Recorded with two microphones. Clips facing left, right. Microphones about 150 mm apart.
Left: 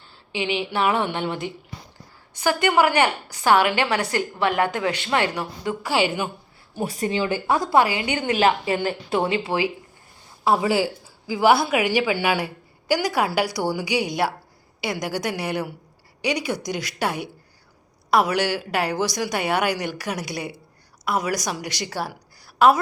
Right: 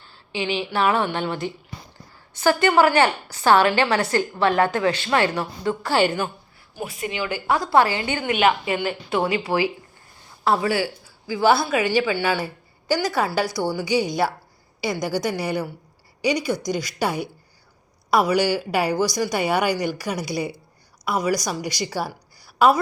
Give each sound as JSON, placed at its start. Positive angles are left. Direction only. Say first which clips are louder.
{"t": 0.3, "sound": "a woman's voice", "louder": "even", "side_deg": 20}
{"t": 6.7, "sound": "a woman's voice", "louder": "left 4 dB", "side_deg": 35}
{"t": 8.2, "sound": "a woman's voice", "louder": "even", "side_deg": 30}